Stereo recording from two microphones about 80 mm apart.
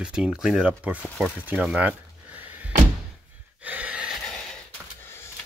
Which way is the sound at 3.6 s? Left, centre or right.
Centre.